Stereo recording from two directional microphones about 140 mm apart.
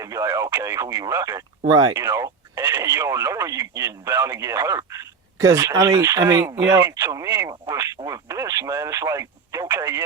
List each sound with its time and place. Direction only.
0.0 s speech: 20° right (ahead or behind)